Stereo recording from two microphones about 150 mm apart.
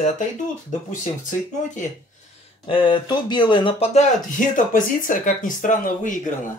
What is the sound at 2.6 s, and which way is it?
Speech, 30° left (ahead or behind).